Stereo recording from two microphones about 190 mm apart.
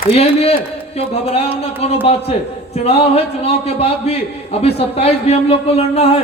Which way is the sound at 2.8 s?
30° left (ahead or behind).